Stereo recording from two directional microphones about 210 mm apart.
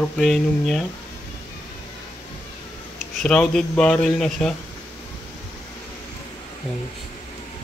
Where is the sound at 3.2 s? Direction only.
5° left (ahead or behind).